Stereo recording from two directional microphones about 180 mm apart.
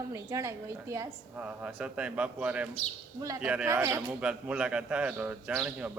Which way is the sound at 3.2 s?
15° right (ahead or behind).